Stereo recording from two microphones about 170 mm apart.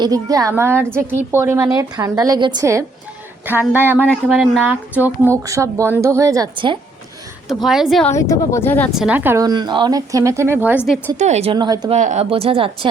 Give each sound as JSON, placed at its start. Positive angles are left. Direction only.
{"t": 0.0, "sound": "a child's voice", "side_deg": -20}
{"t": 7.6, "sound": "a woman's voice", "side_deg": 0}
{"t": 8.1, "sound": "speech", "side_deg": 20}
{"t": 8.9, "sound": "speech", "side_deg": -5}
{"t": 11.2, "sound": "speech", "side_deg": -40}
{"t": 11.5, "sound": "a child's voice", "side_deg": -25}
{"t": 11.9, "sound": "speech", "side_deg": -40}